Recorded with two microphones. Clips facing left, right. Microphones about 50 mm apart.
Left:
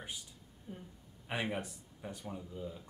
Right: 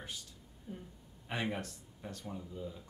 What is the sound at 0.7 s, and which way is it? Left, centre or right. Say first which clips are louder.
Speech: right 1 dB; centre.